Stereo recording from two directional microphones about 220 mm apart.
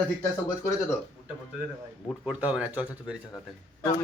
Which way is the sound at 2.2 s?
5° right (ahead or behind).